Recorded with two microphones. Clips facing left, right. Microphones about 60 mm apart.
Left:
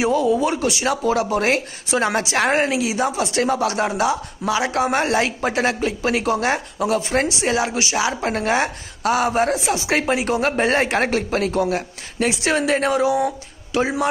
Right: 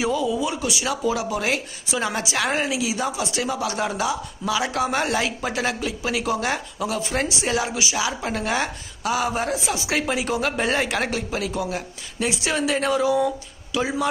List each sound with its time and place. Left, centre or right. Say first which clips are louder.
0.1 s speech: left 5 dB; left